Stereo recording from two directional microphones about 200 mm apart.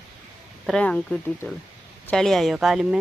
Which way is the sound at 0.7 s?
5° left (ahead or behind).